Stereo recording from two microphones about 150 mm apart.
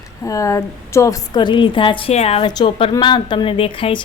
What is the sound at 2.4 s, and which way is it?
A woman's voice, 30° left (ahead or behind).